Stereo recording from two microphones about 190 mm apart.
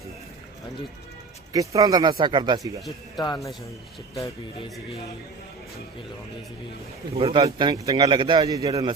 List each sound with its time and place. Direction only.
1.5 s a man's voice: 20° right (ahead or behind)
3.2 s speech: 20° left (ahead or behind)
7.2 s a man's voice: 30° right (ahead or behind)